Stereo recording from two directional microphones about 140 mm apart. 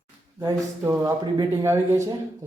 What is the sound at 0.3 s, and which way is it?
Speech, 20° right (ahead or behind).